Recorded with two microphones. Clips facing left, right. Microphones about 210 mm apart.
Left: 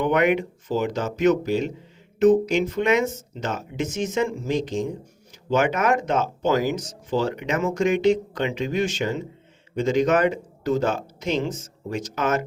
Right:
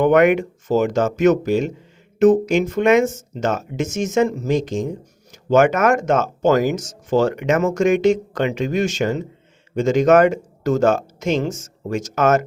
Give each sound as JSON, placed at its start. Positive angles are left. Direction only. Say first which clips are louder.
{"t": 0.0, "sound": "speech", "louder": "right 6 dB", "side_deg": -45}